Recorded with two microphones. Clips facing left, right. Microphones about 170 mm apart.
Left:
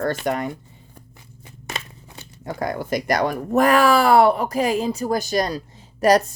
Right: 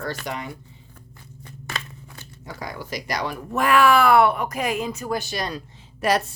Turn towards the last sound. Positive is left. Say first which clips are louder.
# left 6 dB
turn(degrees=40)  # may be behind; listen again after turning